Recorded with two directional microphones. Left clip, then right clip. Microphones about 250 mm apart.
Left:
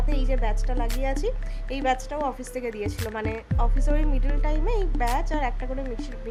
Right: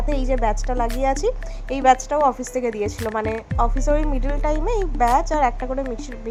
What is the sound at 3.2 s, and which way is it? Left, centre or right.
A woman's voice, centre.